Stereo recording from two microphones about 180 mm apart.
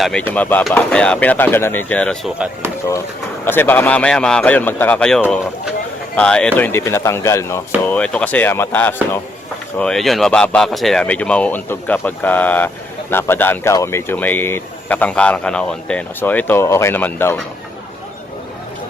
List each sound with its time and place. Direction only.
0.0 s speech: 5° left (ahead or behind)
3.4 s speech: 10° left (ahead or behind)